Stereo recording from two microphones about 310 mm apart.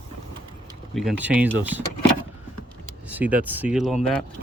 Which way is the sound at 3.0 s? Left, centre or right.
Centre.